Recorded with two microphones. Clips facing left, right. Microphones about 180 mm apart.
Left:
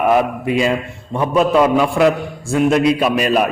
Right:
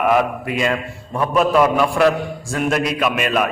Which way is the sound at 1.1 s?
25° left (ahead or behind).